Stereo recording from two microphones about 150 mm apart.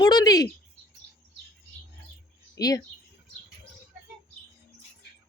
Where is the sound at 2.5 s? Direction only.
25° left (ahead or behind).